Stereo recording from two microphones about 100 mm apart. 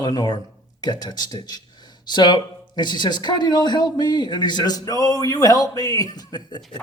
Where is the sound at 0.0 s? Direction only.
40° left (ahead or behind).